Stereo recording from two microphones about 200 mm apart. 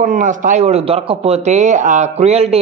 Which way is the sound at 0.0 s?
40° right (ahead or behind).